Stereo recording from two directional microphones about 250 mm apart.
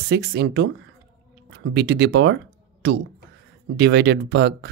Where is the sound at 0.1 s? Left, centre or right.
Right.